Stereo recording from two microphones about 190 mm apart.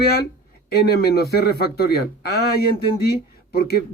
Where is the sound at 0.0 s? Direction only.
55° left (ahead or behind).